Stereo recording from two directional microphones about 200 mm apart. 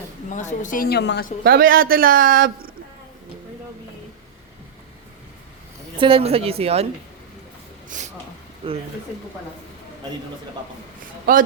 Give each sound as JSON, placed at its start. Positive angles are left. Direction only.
{"t": 0.3, "sound": "a woman's voice", "side_deg": 40}
{"t": 1.5, "sound": "a man's voice", "side_deg": -50}
{"t": 6.0, "sound": "a woman's voice", "side_deg": -25}
{"t": 7.9, "sound": "a sound", "side_deg": -40}
{"t": 8.6, "sound": "a woman's voice", "side_deg": -30}
{"t": 11.3, "sound": "a man's voice", "side_deg": -45}